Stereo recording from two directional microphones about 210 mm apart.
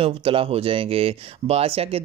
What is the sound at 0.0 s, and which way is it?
Speech, 25° right (ahead or behind).